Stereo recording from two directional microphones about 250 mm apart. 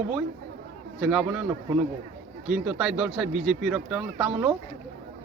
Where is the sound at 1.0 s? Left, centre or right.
Centre.